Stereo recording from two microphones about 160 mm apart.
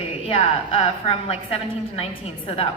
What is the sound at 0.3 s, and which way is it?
A woman's voice, 35° left (ahead or behind).